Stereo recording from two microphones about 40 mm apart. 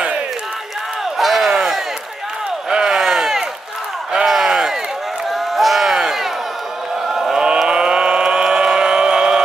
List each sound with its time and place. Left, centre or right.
1.1 s a sound: centre
7.1 s chant: centre
7.6 s vehicle: right